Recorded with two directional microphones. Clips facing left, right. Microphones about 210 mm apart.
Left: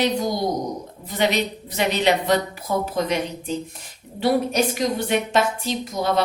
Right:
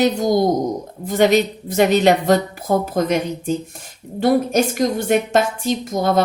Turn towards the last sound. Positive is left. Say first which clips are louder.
# right 4 dB
turn(degrees=-45)  # may be behind; listen again after turning